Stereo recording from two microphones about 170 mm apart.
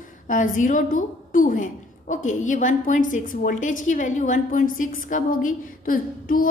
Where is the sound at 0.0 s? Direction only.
50° left (ahead or behind).